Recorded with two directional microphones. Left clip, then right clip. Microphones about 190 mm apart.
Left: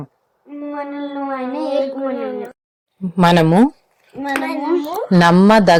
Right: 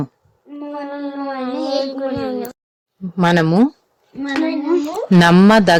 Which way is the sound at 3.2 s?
15° left (ahead or behind).